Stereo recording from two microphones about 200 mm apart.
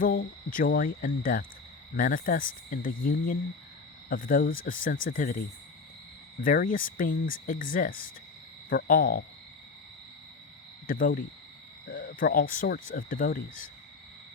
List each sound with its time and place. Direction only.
0.0 s speech: 45° left (ahead or behind)
6.4 s speech: 45° left (ahead or behind)
10.8 s speech: 45° left (ahead or behind)